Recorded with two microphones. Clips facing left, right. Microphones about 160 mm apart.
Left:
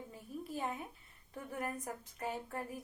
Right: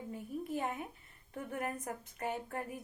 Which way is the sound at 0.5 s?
60° right (ahead or behind).